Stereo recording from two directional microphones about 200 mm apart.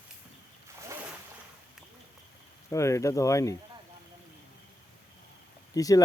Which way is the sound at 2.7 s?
15° left (ahead or behind).